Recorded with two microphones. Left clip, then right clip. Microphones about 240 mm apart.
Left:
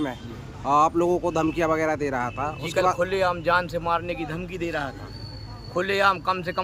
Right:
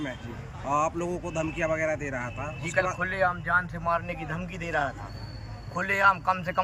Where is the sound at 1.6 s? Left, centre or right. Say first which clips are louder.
Left 2 dB; centre.